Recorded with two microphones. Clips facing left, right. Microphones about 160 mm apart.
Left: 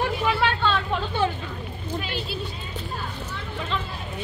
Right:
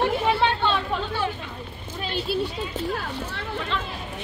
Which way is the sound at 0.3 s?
25° right (ahead or behind).